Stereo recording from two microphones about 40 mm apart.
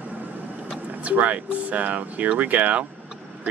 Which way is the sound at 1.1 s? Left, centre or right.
Right.